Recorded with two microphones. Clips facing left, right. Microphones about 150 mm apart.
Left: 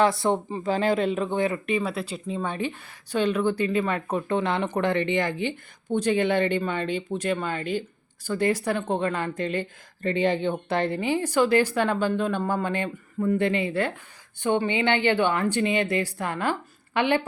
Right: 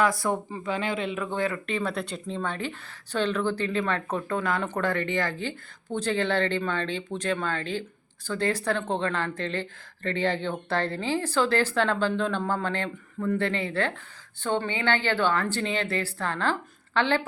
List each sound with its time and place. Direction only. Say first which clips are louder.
0.0 s speech: left 3 dB; 25° left (ahead or behind)
1.2 s a woman's voice: left 3 dB; 20° left (ahead or behind)
4.3 s a woman's voice: left 3 dB; 25° left (ahead or behind)